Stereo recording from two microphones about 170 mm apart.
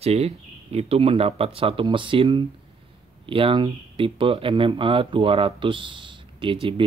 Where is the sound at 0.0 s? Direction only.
35° right (ahead or behind).